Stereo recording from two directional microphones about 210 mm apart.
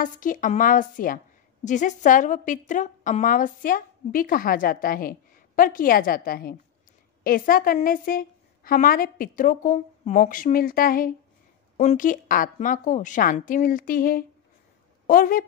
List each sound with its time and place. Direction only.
0.0 s a woman's voice: 40° left (ahead or behind)